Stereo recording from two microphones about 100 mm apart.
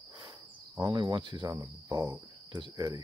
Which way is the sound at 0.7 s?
35° right (ahead or behind).